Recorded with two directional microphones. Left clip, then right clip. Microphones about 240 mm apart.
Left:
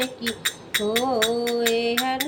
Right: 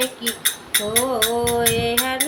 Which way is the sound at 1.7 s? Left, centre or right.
Centre.